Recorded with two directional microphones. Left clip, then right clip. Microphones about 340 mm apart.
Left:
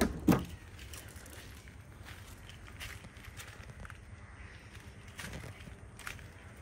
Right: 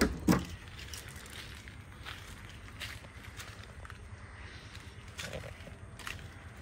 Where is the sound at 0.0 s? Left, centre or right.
Left.